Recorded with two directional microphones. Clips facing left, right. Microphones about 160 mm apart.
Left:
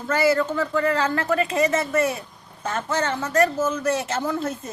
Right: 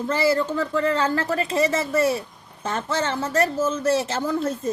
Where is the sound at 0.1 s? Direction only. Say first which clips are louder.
Left 2 dB; 30° right (ahead or behind).